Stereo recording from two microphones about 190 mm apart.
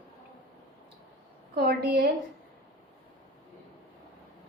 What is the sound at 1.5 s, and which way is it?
Speech, 55° right (ahead or behind).